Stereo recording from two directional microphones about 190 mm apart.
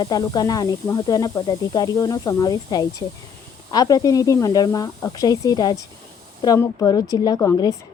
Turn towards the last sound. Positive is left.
turn(degrees=20)  # may be behind; listen again after turning